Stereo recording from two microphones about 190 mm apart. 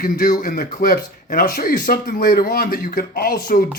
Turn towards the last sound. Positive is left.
turn(degrees=50)  # may be behind; listen again after turning